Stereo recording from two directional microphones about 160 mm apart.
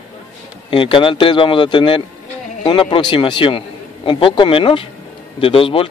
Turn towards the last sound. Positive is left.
turn(degrees=35)  # may be behind; listen again after turning